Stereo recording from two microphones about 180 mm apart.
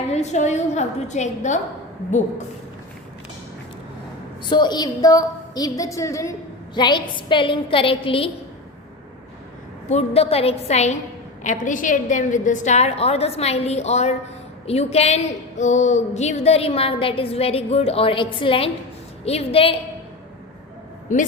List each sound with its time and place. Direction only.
0.1 s a woman's voice: 40° left (ahead or behind)
4.4 s a woman's voice: 25° left (ahead or behind)
9.9 s a woman's voice: 35° left (ahead or behind)